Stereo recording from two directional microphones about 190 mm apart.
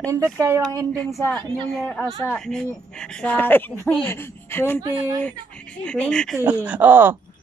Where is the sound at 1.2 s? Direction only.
10° left (ahead or behind).